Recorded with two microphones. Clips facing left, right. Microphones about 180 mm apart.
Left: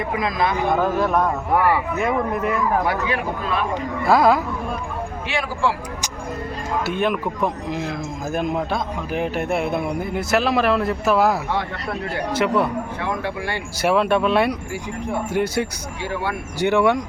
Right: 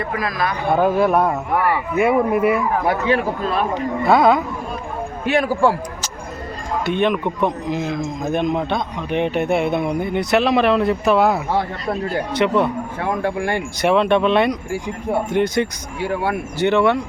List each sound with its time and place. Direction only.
0.2 s speech: 20° left (ahead or behind)
0.7 s speech: 10° right (ahead or behind)
2.8 s speech: 30° right (ahead or behind)
4.1 s speech: centre (ahead or behind)
5.2 s speech: 50° right (ahead or behind)
6.8 s speech: 5° left (ahead or behind)
13.0 s speech: 45° right (ahead or behind)
13.8 s speech: 5° left (ahead or behind)